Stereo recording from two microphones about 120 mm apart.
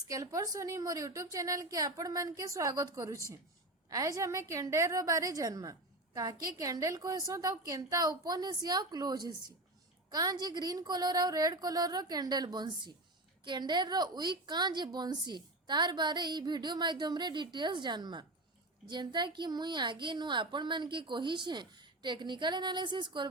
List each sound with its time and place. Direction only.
0.1 s a woman's voice: 30° right (ahead or behind)